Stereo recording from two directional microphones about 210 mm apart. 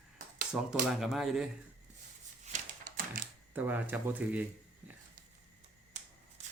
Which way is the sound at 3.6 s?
10° right (ahead or behind).